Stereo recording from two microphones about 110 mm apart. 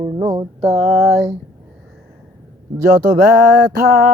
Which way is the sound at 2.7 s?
35° right (ahead or behind).